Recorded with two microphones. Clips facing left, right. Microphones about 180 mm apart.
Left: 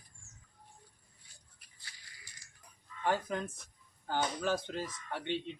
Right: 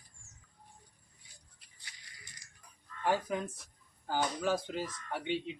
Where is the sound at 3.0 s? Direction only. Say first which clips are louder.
Right 1 dB; 5° right (ahead or behind).